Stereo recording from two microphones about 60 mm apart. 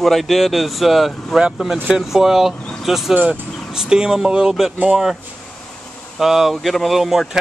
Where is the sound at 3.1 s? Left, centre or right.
Right.